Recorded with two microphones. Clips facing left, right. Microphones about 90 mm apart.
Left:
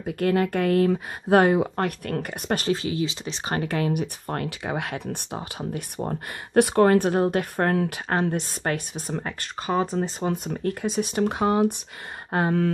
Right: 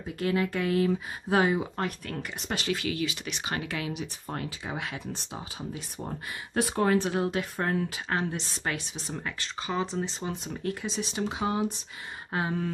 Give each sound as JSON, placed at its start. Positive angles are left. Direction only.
{"t": 0.0, "sound": "speech", "side_deg": 55}
{"t": 2.7, "sound": "speech", "side_deg": 30}